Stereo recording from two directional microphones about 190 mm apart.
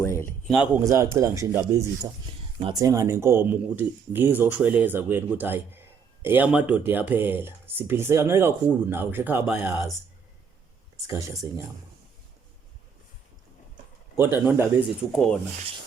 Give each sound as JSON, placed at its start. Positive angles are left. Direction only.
{"t": 0.0, "sound": "a sound", "side_deg": 15}
{"t": 0.5, "sound": "speech", "side_deg": -5}
{"t": 11.0, "sound": "speech", "side_deg": -15}
{"t": 14.3, "sound": "speech", "side_deg": -10}
{"t": 15.1, "sound": "speech", "side_deg": 0}